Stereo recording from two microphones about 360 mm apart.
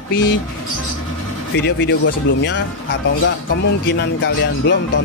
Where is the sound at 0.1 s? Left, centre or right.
Left.